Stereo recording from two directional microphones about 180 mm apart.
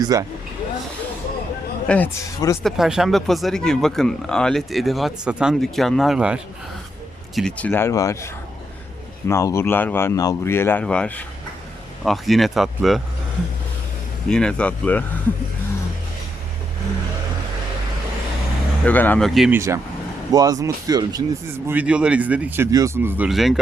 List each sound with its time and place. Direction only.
0.0 s speech: 20° right (ahead or behind)
1.9 s speech: 10° left (ahead or behind)
2.6 s speech: centre (ahead or behind)
7.3 s speech: 5° left (ahead or behind)
14.3 s speech: 5° left (ahead or behind)
18.9 s speech: 10° left (ahead or behind)
19.5 s speech: 15° right (ahead or behind)